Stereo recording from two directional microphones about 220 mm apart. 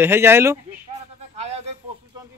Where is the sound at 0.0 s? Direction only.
10° right (ahead or behind).